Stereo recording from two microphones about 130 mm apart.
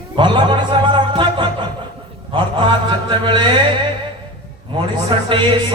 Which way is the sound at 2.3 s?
40° right (ahead or behind).